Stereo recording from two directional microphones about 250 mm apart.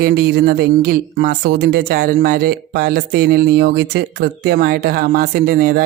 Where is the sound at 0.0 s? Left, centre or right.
Right.